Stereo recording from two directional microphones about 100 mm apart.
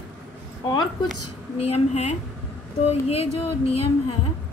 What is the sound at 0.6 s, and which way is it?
Speech, 50° left (ahead or behind).